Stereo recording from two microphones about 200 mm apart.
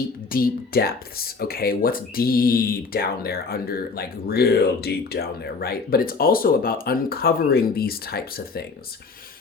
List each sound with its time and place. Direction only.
0.3 s speech: 45° left (ahead or behind)